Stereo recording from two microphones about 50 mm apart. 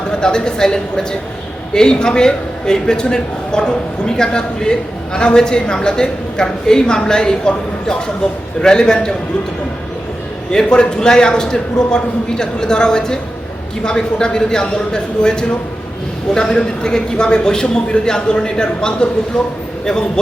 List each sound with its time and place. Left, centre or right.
0.1 s a man's voice: centre
10.5 s a man's voice: centre